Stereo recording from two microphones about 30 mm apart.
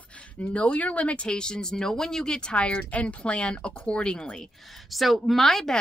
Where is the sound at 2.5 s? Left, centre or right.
Left.